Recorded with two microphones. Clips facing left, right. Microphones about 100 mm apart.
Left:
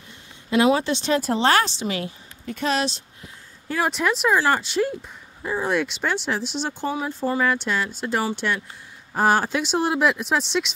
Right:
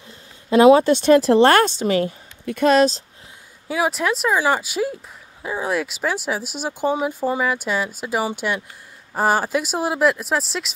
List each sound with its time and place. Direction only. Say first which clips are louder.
0.5 s speech: right 7 dB; 40° right (ahead or behind)
1.2 s speech: right 6 dB; 65° right (ahead or behind); by 3.0 s 45° right (ahead or behind)
3.6 s speech: right 2 dB; 5° right (ahead or behind)